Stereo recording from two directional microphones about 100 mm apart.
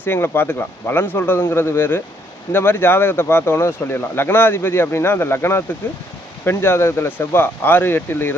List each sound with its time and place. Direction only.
0.0 s speech: 25° left (ahead or behind)